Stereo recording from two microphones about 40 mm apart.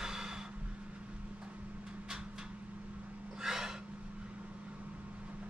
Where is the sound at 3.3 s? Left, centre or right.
Centre.